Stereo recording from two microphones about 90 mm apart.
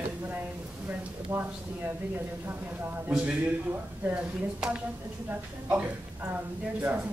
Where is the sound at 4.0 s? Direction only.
15° right (ahead or behind).